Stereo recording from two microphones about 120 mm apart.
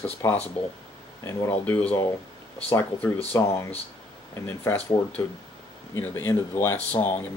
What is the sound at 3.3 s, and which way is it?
Speech, 25° left (ahead or behind).